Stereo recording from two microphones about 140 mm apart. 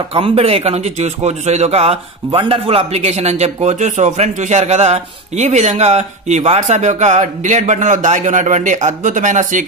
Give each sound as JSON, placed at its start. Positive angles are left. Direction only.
{"t": 0.1, "sound": "a man's voice", "side_deg": -40}